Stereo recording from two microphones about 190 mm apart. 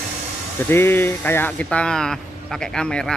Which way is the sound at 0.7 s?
10° left (ahead or behind).